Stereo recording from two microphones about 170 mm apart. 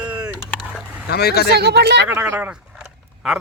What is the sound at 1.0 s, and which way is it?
Speech, 70° left (ahead or behind).